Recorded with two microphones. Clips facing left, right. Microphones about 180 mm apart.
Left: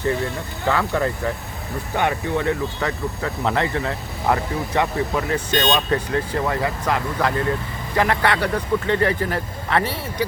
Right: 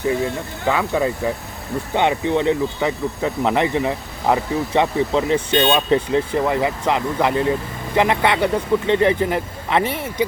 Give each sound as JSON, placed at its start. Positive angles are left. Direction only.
{"t": 0.7, "sound": "speech", "side_deg": -15}